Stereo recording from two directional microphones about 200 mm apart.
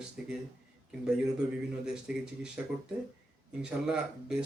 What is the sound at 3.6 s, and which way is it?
Speech, 5° right (ahead or behind).